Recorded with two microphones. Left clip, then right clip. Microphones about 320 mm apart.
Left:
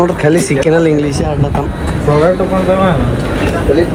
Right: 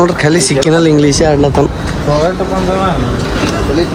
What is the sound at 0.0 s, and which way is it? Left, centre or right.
Speech, centre.